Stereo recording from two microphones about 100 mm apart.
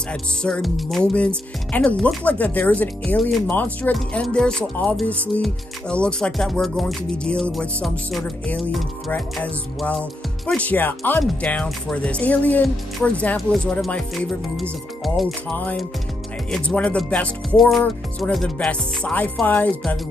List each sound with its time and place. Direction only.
0.1 s music: 10° left (ahead or behind)
1.1 s speech: 10° left (ahead or behind)
5.4 s music: 10° left (ahead or behind)
10.4 s speech: 10° left (ahead or behind)
16.4 s speech: 10° left (ahead or behind)
17.6 s music: centre (ahead or behind)
18.3 s speech: 5° left (ahead or behind)